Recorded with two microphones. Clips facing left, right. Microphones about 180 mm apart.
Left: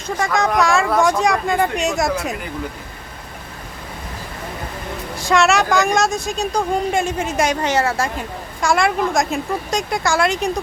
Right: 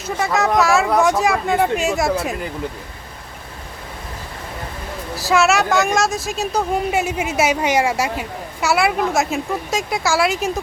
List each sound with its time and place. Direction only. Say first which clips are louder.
0.3 s a woman's voice: right 1 dB; 5° right (ahead or behind)
5.1 s a woman's voice: even; 5° right (ahead or behind)